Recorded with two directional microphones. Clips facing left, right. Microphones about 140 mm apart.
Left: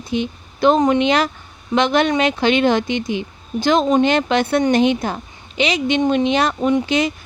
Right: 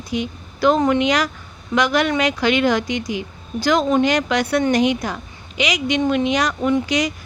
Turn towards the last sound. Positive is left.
turn(degrees=25)  # may be behind; listen again after turning